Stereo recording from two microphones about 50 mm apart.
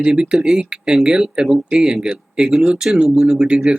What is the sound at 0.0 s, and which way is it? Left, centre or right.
Speech, centre.